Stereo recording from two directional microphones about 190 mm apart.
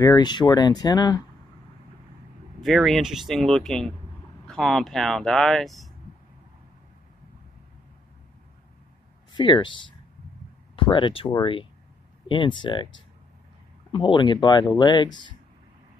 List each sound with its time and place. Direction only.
0.0 s speech: 20° left (ahead or behind)
2.6 s speech: centre (ahead or behind)
9.3 s speech: 25° left (ahead or behind)
13.9 s speech: 25° left (ahead or behind)